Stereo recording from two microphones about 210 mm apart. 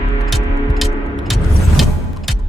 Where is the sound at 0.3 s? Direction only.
Centre (ahead or behind).